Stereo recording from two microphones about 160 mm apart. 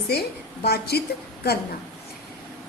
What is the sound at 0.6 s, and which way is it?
Speech, 90° left.